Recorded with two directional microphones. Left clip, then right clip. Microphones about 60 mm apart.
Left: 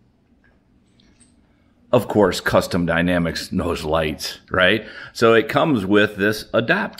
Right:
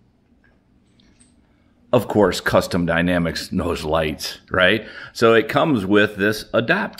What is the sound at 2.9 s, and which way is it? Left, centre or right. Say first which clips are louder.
Speech: even; right.